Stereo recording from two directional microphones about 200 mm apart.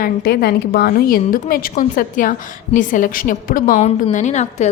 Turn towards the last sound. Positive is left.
turn(degrees=35)  # may be behind; listen again after turning